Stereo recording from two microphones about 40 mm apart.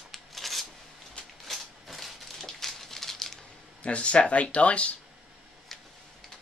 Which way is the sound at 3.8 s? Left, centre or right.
Left.